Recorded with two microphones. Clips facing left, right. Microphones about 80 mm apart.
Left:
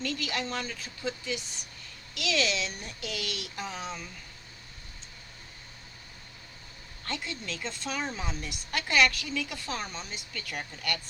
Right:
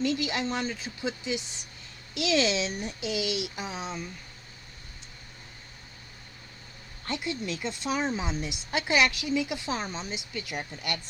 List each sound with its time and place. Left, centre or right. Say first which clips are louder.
0.0 s speech: right 5 dB; centre
7.1 s speech: right 4 dB; centre